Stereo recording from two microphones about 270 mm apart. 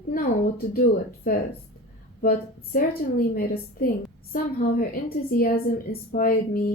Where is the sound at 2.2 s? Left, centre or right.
Left.